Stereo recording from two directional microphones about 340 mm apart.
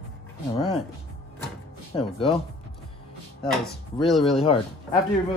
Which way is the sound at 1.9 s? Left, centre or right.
Centre.